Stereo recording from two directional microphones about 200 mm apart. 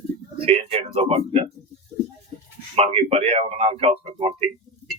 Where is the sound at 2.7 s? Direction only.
30° right (ahead or behind).